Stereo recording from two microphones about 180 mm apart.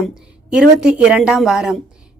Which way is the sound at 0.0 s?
5° right (ahead or behind).